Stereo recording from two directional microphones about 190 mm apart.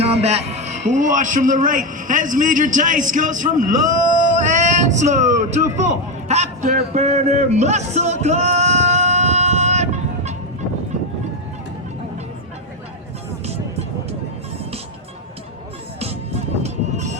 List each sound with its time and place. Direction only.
0.0 s a man's voice: 35° right (ahead or behind)
4.4 s male singing: 40° right (ahead or behind)
5.7 s a sound: 35° right (ahead or behind)
13.4 s music: 35° right (ahead or behind)
16.6 s music: 40° right (ahead or behind)